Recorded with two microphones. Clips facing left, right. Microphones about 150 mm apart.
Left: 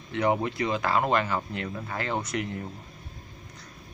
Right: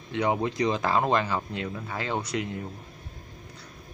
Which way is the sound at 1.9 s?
5° right (ahead or behind).